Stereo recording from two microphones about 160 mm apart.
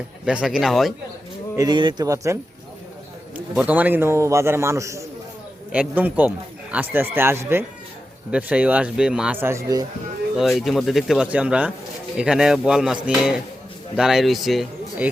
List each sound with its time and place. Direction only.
0.3 s speech: 5° right (ahead or behind)
1.5 s speech: 25° right (ahead or behind)
3.3 s speech: 10° right (ahead or behind)
10.3 s speech: centre (ahead or behind)